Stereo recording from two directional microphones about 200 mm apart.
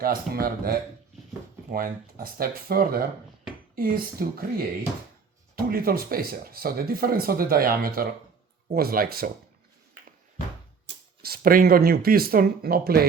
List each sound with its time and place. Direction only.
0.0 s speech: 45° right (ahead or behind)
5.6 s speech: 45° right (ahead or behind)
11.2 s speech: 50° right (ahead or behind)